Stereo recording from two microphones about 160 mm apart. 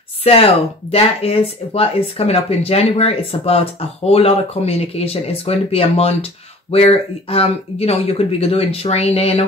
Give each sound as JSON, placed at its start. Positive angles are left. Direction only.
{"t": 0.2, "sound": "speech", "side_deg": 35}